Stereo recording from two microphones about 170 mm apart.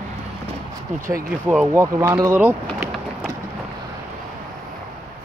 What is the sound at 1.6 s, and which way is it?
Speech, 20° right (ahead or behind).